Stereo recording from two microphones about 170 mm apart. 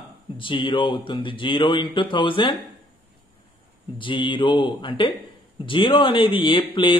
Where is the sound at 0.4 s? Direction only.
30° left (ahead or behind).